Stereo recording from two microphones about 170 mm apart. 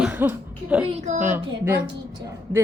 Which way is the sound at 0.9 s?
40° right (ahead or behind).